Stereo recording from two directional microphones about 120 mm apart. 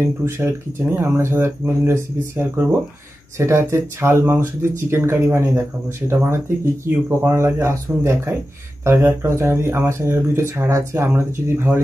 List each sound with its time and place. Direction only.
0.0 s speech: 20° right (ahead or behind)